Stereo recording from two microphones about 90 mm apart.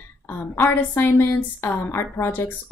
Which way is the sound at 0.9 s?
25° left (ahead or behind).